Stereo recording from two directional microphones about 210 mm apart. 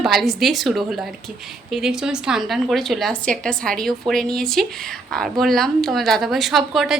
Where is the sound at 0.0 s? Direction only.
Centre (ahead or behind).